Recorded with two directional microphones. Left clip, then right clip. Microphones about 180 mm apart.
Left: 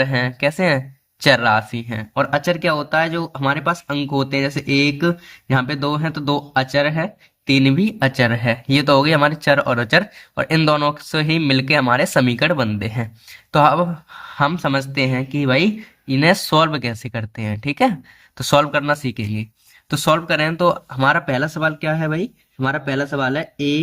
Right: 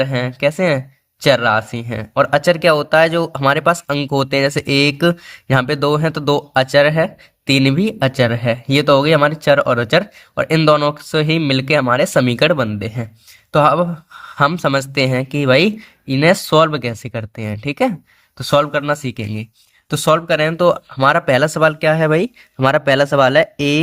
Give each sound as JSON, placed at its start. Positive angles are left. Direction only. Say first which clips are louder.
{"t": 0.0, "sound": "speech", "louder": "right 2 dB", "side_deg": -15}
{"t": 12.6, "sound": "speech", "louder": "right 1 dB", "side_deg": -10}